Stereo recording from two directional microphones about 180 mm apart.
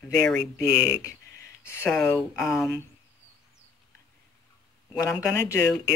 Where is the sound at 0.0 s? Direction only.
10° left (ahead or behind).